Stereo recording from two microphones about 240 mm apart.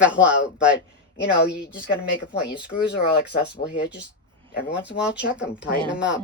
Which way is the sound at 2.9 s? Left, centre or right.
Left.